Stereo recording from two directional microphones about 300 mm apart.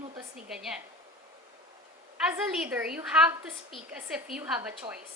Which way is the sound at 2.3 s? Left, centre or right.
Centre.